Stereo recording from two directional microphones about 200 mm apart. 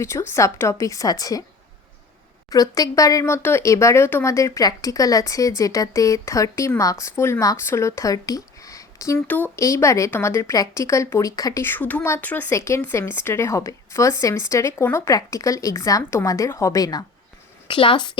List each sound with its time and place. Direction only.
0.0 s speech: 15° left (ahead or behind)
2.5 s speech: 20° left (ahead or behind)